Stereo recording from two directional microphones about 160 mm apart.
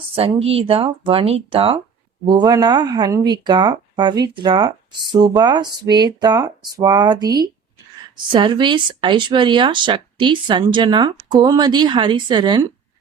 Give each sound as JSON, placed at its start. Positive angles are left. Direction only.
{"t": 0.1, "sound": "speech", "side_deg": -40}